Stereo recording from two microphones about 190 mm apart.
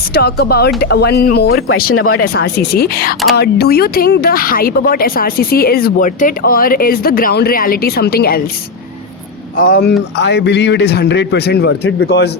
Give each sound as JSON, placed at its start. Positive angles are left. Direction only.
{"t": 0.1, "sound": "a man's voice", "side_deg": 60}
{"t": 2.2, "sound": "speech", "side_deg": 55}
{"t": 9.6, "sound": "speech", "side_deg": 50}
{"t": 10.2, "sound": "a man's voice", "side_deg": 65}